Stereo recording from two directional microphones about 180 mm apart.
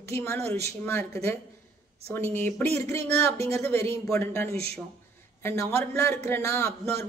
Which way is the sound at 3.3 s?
35° right (ahead or behind).